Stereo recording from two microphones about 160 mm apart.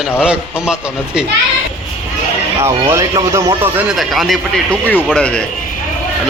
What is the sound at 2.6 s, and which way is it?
Speech, 15° right (ahead or behind).